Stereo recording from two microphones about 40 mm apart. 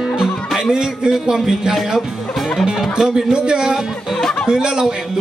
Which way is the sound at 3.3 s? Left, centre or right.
Right.